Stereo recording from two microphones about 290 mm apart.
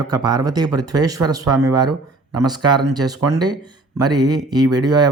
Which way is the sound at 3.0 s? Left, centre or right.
Centre.